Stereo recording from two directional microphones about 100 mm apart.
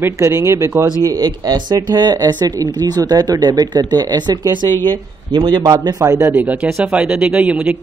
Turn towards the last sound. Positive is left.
turn(degrees=-15)  # may be behind; listen again after turning